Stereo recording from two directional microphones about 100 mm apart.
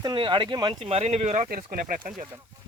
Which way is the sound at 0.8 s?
80° right.